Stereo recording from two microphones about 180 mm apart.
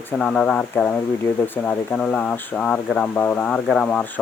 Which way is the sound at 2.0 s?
5° left (ahead or behind).